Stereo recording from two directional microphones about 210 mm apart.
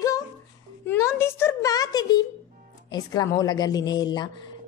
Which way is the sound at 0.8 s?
10° left (ahead or behind).